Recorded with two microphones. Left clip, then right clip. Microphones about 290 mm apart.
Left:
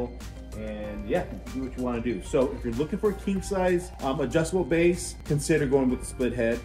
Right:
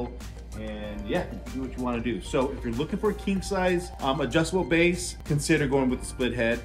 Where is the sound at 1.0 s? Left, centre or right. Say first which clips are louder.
Left 1 dB; centre.